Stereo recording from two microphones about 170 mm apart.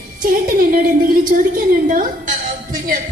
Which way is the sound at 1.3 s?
50° right (ahead or behind).